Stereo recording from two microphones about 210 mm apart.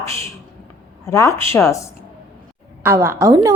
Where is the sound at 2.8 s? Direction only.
10° right (ahead or behind).